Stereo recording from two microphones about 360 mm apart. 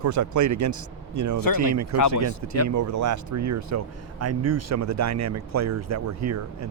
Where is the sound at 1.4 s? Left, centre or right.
Left.